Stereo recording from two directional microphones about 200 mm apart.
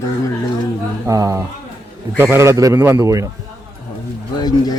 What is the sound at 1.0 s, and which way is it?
A man's voice, 15° right (ahead or behind).